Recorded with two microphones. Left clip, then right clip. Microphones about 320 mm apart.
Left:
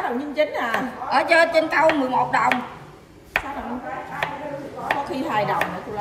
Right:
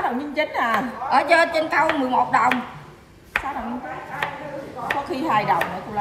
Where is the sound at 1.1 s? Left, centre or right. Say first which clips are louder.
Even; centre.